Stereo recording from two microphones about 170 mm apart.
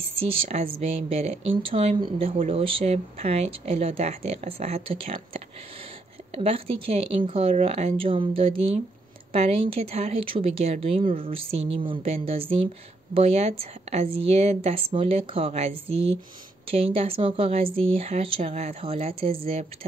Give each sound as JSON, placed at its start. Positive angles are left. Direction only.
{"t": 0.0, "sound": "speech", "side_deg": -35}
{"t": 6.3, "sound": "speech", "side_deg": -35}
{"t": 16.7, "sound": "speech", "side_deg": -35}